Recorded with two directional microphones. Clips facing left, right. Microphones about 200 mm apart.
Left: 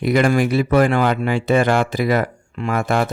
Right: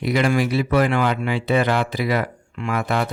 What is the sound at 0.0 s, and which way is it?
Speech, 50° left (ahead or behind).